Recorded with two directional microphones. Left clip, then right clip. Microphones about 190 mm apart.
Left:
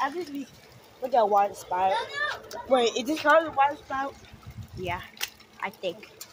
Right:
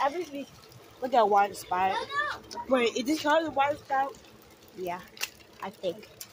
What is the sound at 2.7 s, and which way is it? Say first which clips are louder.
Speech: left 3 dB; 25° right (ahead or behind).